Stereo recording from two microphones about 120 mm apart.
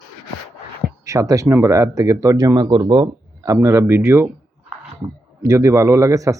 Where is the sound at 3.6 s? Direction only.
25° right (ahead or behind).